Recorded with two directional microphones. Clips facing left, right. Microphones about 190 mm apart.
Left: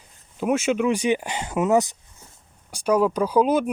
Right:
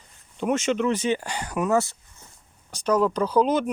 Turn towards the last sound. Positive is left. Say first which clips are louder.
# left 2 dB
turn(degrees=10)  # may be behind; listen again after turning